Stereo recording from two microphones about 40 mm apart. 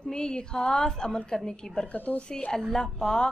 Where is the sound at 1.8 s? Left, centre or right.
Left.